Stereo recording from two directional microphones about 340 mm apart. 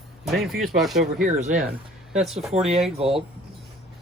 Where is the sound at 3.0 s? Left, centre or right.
Centre.